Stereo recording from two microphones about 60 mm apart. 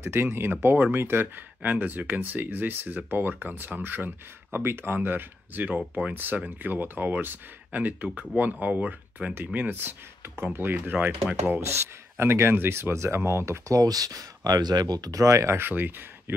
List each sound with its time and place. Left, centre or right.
0.0 s speech: right
11.0 s speech: right
11.6 s speech: right
13.7 s speech: right
15.6 s speech: right